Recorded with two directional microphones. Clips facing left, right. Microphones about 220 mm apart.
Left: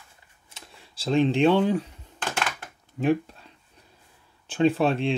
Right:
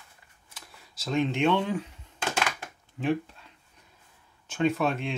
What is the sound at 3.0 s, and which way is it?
Speech, 40° left (ahead or behind).